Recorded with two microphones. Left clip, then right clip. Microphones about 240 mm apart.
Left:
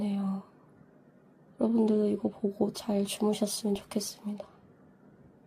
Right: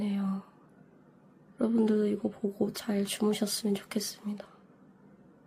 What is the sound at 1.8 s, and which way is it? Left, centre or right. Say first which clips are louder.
Speech: even; centre.